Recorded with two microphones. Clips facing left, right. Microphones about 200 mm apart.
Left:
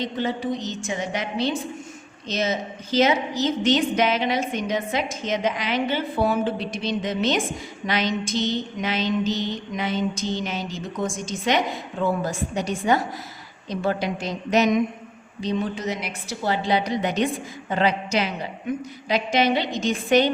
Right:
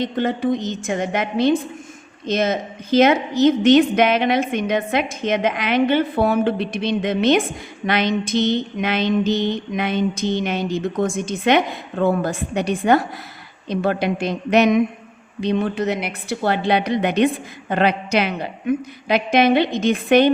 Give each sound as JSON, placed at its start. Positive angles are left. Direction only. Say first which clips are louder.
{"t": 0.0, "sound": "a woman's voice", "louder": "right 5 dB", "side_deg": -55}